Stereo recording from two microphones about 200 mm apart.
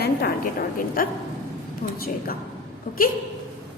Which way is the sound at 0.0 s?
55° left (ahead or behind).